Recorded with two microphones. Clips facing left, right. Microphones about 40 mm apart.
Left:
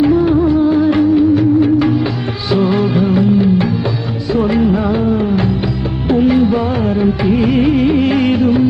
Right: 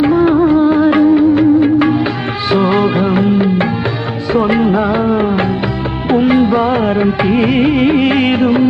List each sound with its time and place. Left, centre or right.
0.0 s music of bollywood: right
4.3 s music: right
6.1 s music of bollywood: right